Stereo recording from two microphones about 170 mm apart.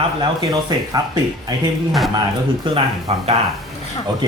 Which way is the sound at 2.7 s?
35° right (ahead or behind).